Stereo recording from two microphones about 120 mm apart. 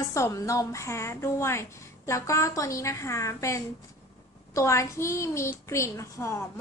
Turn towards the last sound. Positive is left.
turn(degrees=25)  # may be behind; listen again after turning